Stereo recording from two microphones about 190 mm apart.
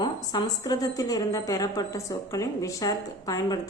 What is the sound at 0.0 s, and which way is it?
A woman's voice, 20° left (ahead or behind).